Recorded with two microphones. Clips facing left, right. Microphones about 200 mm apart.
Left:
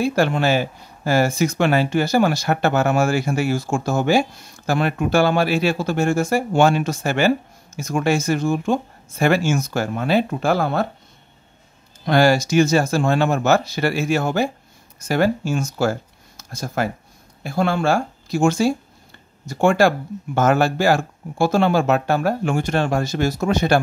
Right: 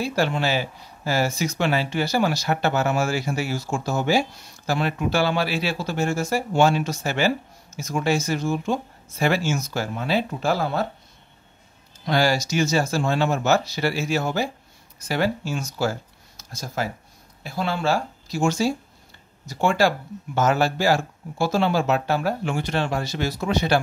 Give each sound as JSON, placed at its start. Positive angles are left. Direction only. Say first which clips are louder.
{"t": 0.0, "sound": "speech", "louder": "left 5 dB", "side_deg": 50}
{"t": 12.1, "sound": "speech", "louder": "left 5 dB", "side_deg": 50}